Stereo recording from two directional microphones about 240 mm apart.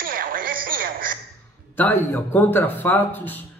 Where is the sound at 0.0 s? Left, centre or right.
Right.